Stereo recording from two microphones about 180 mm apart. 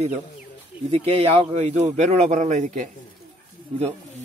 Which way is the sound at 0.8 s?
30° right (ahead or behind).